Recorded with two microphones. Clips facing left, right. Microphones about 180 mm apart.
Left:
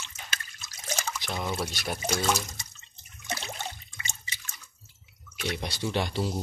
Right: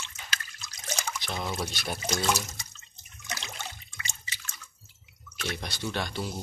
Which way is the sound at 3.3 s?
25° left (ahead or behind).